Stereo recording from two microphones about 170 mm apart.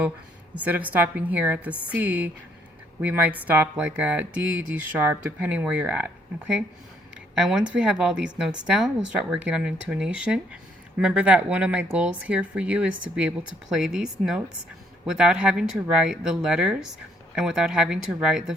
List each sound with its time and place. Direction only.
0.5 s speech: 10° right (ahead or behind)